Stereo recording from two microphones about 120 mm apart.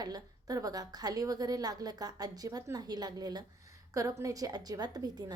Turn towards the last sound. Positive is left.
turn(degrees=-35)  # may be behind; listen again after turning